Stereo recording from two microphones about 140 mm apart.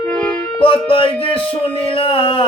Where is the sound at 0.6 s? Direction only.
40° left (ahead or behind).